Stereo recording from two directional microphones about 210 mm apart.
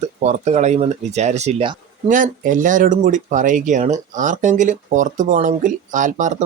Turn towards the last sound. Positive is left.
turn(degrees=-35)  # may be behind; listen again after turning